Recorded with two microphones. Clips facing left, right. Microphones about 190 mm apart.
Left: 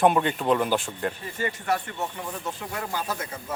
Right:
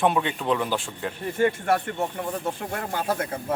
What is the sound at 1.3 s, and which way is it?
Speech, 55° right (ahead or behind).